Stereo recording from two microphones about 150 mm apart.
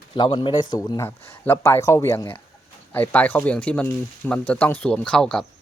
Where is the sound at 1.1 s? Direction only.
15° left (ahead or behind).